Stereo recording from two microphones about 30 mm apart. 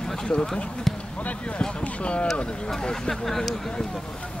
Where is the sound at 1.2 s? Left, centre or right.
Left.